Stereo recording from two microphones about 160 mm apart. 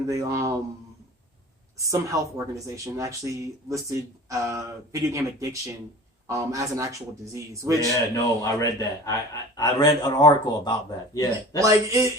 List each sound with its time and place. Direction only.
0.1 s speech: 20° right (ahead or behind)
1.9 s speech: 20° right (ahead or behind)
8.1 s speech: 20° left (ahead or behind)
11.6 s speech: 20° right (ahead or behind)